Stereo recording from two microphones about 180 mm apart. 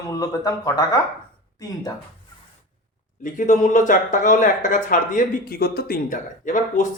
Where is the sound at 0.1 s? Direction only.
20° left (ahead or behind).